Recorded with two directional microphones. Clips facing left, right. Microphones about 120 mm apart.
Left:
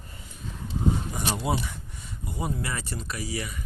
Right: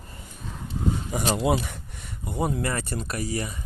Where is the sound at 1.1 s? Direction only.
90° right; by 3.7 s 35° right (ahead or behind).